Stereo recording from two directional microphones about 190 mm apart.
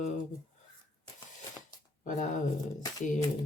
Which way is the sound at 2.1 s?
40° left (ahead or behind).